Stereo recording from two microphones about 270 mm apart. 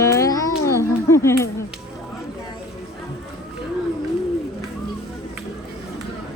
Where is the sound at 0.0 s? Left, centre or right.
Centre.